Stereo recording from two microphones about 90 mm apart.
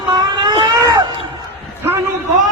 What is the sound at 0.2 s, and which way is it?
Vehicle, 50° right (ahead or behind).